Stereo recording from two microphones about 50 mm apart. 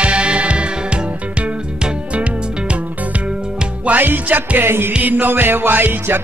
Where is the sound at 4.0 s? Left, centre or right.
Right.